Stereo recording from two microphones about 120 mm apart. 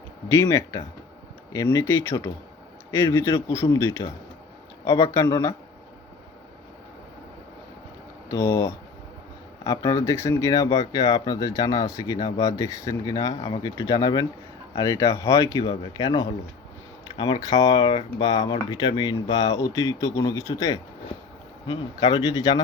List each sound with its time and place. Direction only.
0.4 s speech: 25° left (ahead or behind)
8.3 s speech: 25° left (ahead or behind)
17.2 s speech: 45° left (ahead or behind)
17.5 s speech: 35° left (ahead or behind)